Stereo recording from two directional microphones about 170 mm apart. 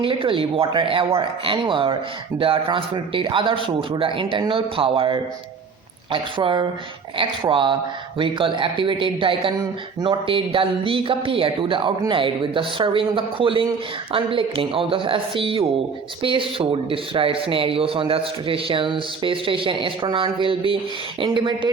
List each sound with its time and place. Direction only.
0.0 s a man's voice: 30° right (ahead or behind)